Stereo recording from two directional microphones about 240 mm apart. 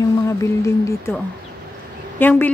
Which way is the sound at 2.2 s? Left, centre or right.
Centre.